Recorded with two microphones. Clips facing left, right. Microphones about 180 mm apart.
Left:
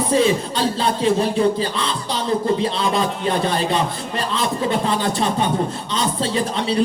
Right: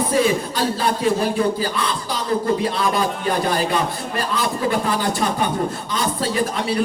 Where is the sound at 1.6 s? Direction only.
25° left (ahead or behind).